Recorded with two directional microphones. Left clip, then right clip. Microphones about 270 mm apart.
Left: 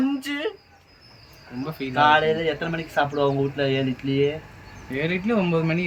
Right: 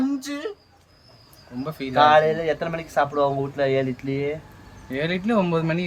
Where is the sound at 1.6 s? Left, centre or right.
Centre.